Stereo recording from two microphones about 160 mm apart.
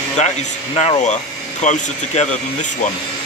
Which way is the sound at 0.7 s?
45° left (ahead or behind).